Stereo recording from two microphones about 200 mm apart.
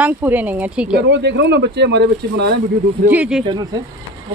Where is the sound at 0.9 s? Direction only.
60° right (ahead or behind).